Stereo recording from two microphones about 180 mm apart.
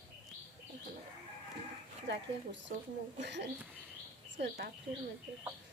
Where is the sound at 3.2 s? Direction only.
70° right (ahead or behind).